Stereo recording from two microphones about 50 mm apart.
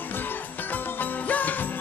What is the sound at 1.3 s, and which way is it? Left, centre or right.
Music, left.